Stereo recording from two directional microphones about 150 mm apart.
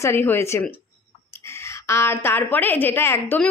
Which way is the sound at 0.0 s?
15° left (ahead or behind).